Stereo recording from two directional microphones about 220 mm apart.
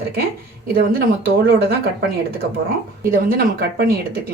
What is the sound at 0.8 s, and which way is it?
Speech, 45° right (ahead or behind).